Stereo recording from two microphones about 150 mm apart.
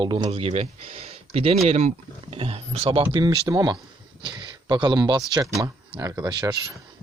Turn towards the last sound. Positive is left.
turn(degrees=-20)  # may be behind; listen again after turning